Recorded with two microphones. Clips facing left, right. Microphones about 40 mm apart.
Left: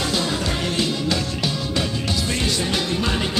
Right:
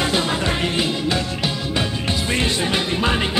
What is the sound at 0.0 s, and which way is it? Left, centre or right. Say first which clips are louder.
Music: right 3 dB; right.